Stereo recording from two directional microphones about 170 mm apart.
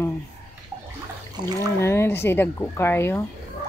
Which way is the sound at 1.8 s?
15° left (ahead or behind).